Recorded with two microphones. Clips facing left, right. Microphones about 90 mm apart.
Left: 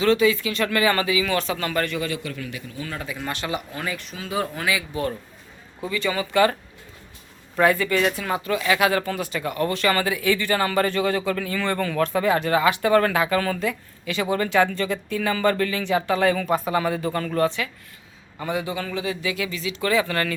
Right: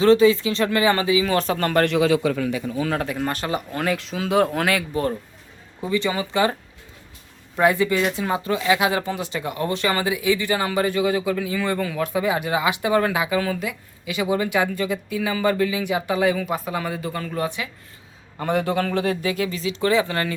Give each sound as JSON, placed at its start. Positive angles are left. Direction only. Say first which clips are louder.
{"t": 0.0, "sound": "speech", "louder": "right 4 dB", "side_deg": -35}
{"t": 3.1, "sound": "speech", "louder": "right 4 dB", "side_deg": -45}
{"t": 3.7, "sound": "speech", "louder": "right 6 dB", "side_deg": -65}
{"t": 5.8, "sound": "speech", "louder": "right 2 dB", "side_deg": -25}
{"t": 18.3, "sound": "speech", "louder": "right 5 dB", "side_deg": -50}